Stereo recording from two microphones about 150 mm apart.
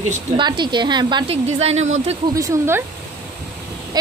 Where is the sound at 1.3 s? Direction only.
45° right (ahead or behind).